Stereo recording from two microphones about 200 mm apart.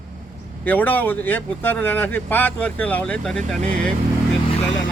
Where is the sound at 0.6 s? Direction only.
10° left (ahead or behind).